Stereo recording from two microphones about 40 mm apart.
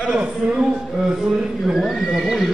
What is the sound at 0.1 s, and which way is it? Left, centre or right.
A man's voice, right.